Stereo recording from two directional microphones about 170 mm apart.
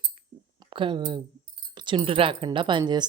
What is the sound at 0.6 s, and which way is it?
A woman's voice, 30° right (ahead or behind).